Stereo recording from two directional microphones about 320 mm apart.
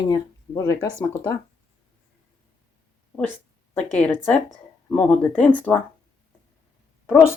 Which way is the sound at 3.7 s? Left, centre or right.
Centre.